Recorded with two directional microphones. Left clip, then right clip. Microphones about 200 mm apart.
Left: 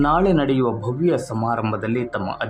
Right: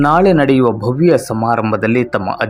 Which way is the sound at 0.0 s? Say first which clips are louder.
Right 7 dB; 25° right (ahead or behind).